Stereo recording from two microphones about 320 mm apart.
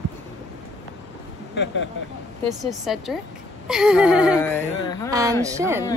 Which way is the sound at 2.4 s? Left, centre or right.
Centre.